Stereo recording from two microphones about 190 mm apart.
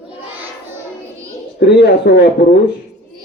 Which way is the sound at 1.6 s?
60° left (ahead or behind).